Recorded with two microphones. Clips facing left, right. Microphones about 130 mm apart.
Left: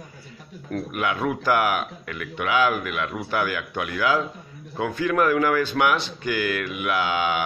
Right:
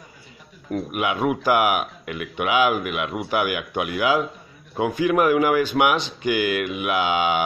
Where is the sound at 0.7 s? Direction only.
15° right (ahead or behind).